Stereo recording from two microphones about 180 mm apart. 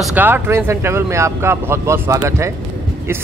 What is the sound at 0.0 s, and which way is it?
Speech, 10° right (ahead or behind).